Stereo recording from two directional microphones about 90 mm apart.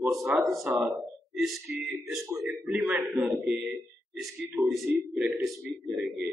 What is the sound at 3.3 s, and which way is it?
Speech, 10° right (ahead or behind).